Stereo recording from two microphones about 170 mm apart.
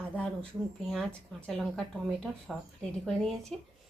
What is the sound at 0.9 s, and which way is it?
Speech, centre (ahead or behind).